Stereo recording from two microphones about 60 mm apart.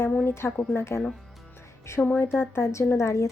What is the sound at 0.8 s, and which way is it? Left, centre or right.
Speech, left.